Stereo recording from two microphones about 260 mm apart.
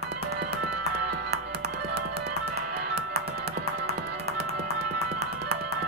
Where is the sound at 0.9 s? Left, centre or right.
Right.